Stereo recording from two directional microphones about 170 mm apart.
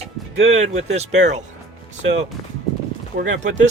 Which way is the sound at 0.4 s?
40° right (ahead or behind).